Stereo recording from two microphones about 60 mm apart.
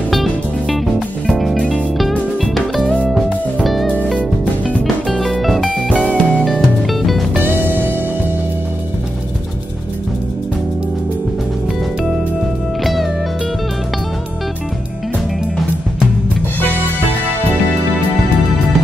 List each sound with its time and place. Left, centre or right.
0.1 s music: centre
3.8 s music: left
5.2 s music: centre
5.9 s music: centre
6.6 s music: centre
7.3 s music: right
12.8 s music: centre